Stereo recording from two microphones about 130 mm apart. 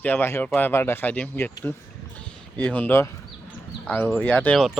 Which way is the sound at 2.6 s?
10° left (ahead or behind).